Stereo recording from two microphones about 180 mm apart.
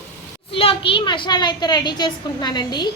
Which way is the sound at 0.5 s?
30° left (ahead or behind).